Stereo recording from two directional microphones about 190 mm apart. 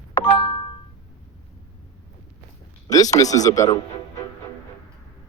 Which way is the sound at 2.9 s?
20° left (ahead or behind).